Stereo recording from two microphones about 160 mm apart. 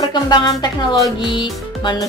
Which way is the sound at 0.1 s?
25° left (ahead or behind).